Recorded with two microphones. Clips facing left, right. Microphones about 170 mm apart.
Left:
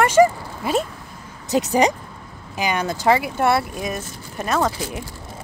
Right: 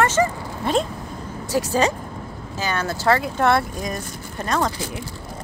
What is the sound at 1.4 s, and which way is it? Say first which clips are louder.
Speech: left 2 dB; 20° left (ahead or behind).